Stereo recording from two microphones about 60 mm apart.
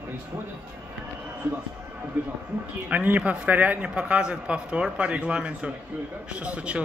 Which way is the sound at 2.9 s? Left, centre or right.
Right.